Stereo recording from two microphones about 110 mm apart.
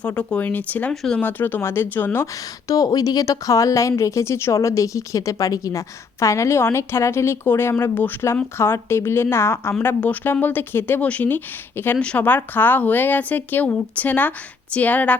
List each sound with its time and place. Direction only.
0.2 s speech: 10° left (ahead or behind)
2.2 s a woman's voice: 30° left (ahead or behind); by 15.1 s 15° left (ahead or behind)